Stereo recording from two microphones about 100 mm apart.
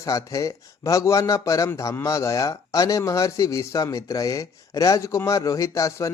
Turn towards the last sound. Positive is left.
turn(degrees=30)  # may be behind; listen again after turning